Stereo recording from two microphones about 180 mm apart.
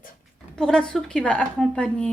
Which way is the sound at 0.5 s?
5° left (ahead or behind).